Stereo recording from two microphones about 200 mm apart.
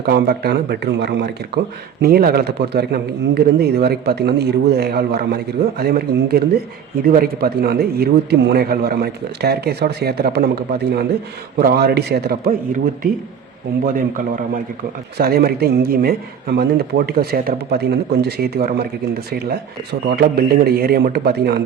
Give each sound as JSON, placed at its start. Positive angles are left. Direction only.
{"t": 0.0, "sound": "a man's voice", "side_deg": -50}